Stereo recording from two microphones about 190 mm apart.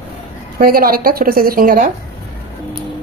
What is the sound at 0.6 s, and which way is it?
A woman's voice, 50° right (ahead or behind).